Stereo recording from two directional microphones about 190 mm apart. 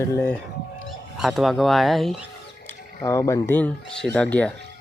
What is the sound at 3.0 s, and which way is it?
Speech, 15° left (ahead or behind).